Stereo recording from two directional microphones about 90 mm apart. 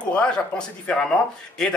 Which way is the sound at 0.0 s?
10° left (ahead or behind).